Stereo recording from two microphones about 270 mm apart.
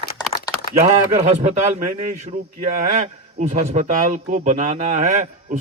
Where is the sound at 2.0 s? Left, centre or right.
Right.